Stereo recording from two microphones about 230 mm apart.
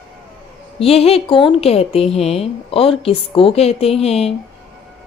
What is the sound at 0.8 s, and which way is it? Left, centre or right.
A woman's voice, left.